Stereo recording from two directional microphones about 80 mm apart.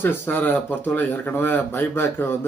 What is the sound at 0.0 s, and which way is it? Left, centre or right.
Speech, left.